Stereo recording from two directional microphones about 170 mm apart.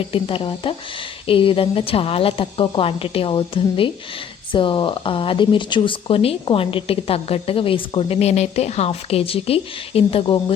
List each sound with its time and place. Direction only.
0.1 s speech: 30° left (ahead or behind)